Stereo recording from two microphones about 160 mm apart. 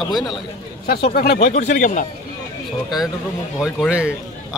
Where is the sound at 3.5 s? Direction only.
5° right (ahead or behind).